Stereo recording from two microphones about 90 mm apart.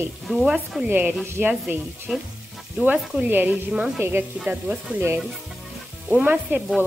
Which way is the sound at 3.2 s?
20° right (ahead or behind).